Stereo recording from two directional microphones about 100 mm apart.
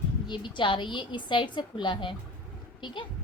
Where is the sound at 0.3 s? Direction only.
55° left (ahead or behind).